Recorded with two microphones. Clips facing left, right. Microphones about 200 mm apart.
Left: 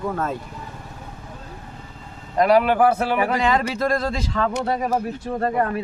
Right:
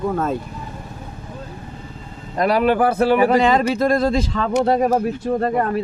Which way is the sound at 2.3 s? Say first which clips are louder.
Even; 35° right (ahead or behind).